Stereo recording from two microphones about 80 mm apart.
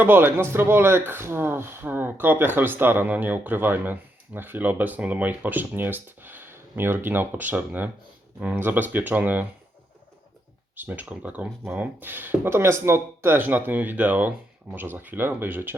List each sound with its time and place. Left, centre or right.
0.0 s speech: right
10.8 s speech: right